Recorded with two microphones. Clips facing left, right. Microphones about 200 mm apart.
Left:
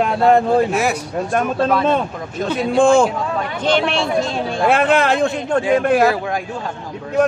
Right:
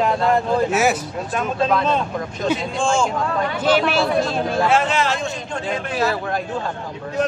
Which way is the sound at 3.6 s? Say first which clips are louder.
Even; 5° right (ahead or behind).